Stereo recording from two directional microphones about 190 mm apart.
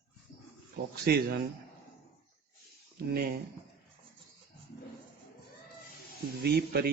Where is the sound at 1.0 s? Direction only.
55° right (ahead or behind).